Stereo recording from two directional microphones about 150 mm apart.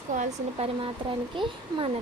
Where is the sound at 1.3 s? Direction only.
35° right (ahead or behind).